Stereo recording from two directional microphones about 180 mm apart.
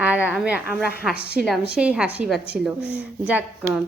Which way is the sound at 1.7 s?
5° right (ahead or behind).